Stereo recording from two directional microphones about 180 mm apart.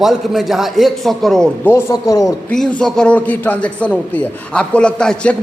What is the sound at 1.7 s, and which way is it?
Speech, 15° left (ahead or behind).